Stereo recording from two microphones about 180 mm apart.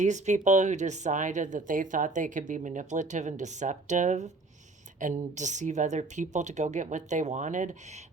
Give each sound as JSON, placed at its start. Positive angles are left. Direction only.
{"t": 0.0, "sound": "speech", "side_deg": -40}